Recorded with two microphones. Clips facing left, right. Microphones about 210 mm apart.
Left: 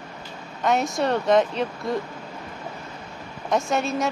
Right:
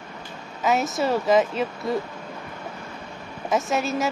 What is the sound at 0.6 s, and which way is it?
A woman's voice, 5° right (ahead or behind).